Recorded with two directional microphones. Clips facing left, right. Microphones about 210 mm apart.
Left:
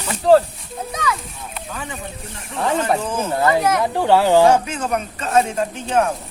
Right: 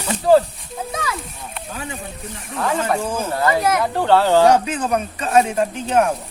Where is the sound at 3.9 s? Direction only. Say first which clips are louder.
Left 1 dB; 15° left (ahead or behind).